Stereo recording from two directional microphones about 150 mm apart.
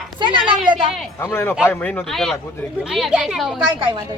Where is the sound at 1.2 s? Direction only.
15° left (ahead or behind); by 3.5 s centre (ahead or behind).